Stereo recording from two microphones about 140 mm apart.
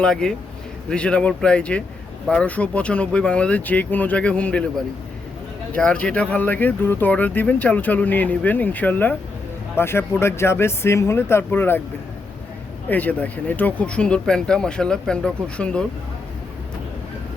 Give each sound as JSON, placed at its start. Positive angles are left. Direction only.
{"t": 0.0, "sound": "a man's voice", "side_deg": 5}
{"t": 5.7, "sound": "speech", "side_deg": 10}
{"t": 12.9, "sound": "speech", "side_deg": 10}